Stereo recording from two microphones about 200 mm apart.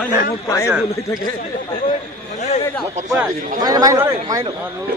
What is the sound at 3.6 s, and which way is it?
Speech, 20° right (ahead or behind).